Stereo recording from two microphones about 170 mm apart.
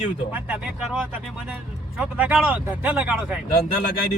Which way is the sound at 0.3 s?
10° right (ahead or behind).